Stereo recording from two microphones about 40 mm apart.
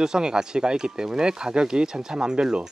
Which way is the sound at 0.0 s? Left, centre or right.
Centre.